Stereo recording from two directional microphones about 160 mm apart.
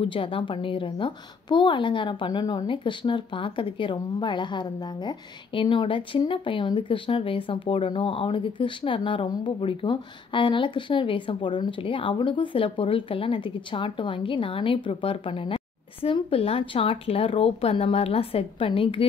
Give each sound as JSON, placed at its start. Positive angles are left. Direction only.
{"t": 0.0, "sound": "a woman's voice", "side_deg": 35}